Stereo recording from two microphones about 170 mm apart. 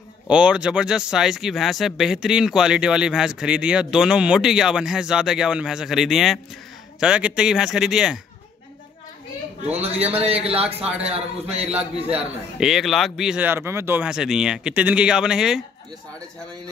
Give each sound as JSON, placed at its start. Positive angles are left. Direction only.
{"t": 0.3, "sound": "speech", "side_deg": -5}
{"t": 9.7, "sound": "a man's voice", "side_deg": -40}
{"t": 10.6, "sound": "a man's voice", "side_deg": -5}
{"t": 11.1, "sound": "a man's voice", "side_deg": -35}
{"t": 12.5, "sound": "speech", "side_deg": 0}